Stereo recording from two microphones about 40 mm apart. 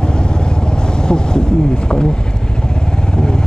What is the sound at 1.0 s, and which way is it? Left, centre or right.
Speech, left.